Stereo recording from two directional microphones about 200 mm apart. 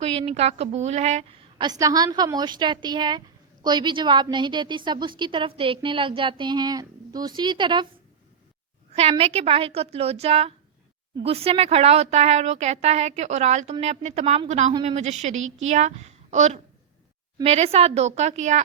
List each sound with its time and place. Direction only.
0.0 s speech: 30° right (ahead or behind)
1.6 s a woman's voice: 20° right (ahead or behind)
8.9 s a woman's voice: 30° right (ahead or behind)